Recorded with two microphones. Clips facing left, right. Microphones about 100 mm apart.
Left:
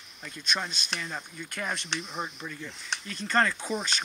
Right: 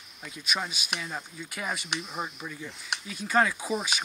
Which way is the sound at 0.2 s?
5° right (ahead or behind).